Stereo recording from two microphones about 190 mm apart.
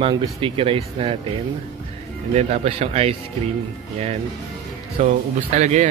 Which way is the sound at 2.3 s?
35° right (ahead or behind).